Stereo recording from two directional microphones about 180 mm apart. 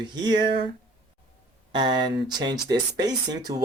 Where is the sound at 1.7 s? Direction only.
25° right (ahead or behind).